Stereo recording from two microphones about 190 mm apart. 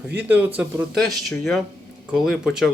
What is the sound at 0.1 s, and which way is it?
Speech, 10° right (ahead or behind).